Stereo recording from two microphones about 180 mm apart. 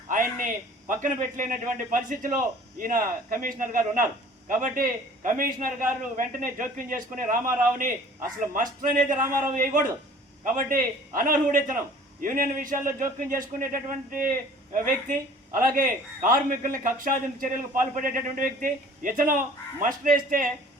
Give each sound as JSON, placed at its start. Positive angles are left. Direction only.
{"t": 0.1, "sound": "a man's voice", "side_deg": -45}